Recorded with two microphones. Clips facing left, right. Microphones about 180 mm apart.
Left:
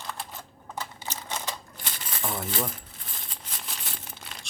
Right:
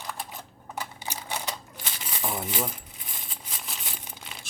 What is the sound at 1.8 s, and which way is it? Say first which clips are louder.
Crumpling: right 1 dB; 5° right (ahead or behind).